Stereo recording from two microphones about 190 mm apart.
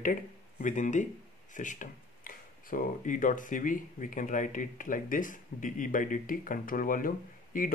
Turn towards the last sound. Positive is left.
turn(degrees=45)  # may be behind; listen again after turning